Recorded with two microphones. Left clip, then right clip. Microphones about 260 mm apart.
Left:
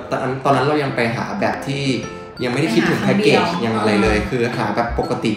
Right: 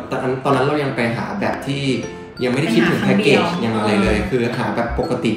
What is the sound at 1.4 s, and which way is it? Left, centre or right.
Speech, left.